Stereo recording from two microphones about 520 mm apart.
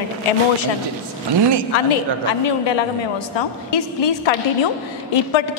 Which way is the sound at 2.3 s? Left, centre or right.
Left.